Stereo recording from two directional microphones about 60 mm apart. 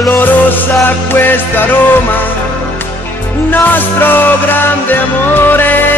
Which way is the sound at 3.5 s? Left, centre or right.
Left.